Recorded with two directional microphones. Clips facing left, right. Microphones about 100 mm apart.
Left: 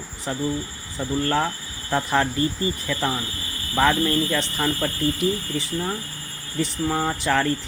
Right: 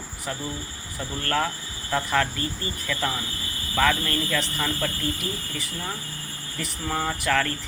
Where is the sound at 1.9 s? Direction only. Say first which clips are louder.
Left 2 dB; 25° left (ahead or behind).